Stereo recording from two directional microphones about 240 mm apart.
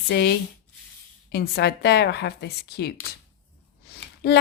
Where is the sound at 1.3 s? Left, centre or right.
Left.